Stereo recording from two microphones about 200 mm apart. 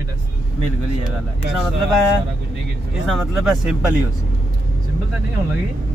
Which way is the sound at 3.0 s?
Centre (ahead or behind).